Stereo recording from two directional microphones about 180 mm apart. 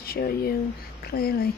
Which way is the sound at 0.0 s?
60° left (ahead or behind).